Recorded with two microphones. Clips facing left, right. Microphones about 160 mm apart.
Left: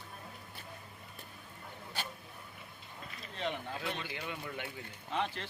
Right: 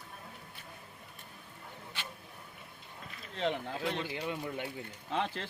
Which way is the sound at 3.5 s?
30° right (ahead or behind).